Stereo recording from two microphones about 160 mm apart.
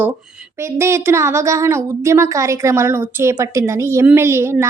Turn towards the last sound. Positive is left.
turn(degrees=-15)  # may be behind; listen again after turning